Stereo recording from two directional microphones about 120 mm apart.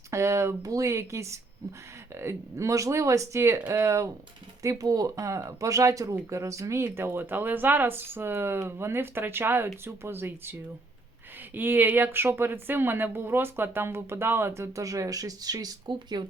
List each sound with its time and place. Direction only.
0.1 s speech: 25° right (ahead or behind)